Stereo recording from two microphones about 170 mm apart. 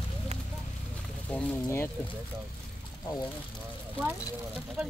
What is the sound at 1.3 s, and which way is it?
Speech, 5° left (ahead or behind).